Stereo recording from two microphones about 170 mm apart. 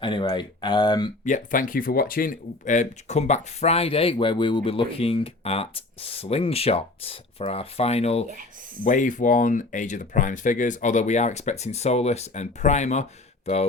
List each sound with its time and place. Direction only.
0.0 s speech: 25° left (ahead or behind)
1.2 s speech: 50° left (ahead or behind)
8.8 s speech: 50° left (ahead or behind)